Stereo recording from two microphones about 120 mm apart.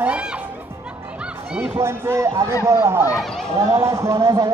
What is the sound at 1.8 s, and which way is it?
A man's voice, 20° right (ahead or behind).